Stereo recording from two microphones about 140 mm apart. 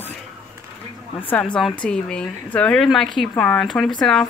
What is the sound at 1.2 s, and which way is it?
Speech, 10° left (ahead or behind).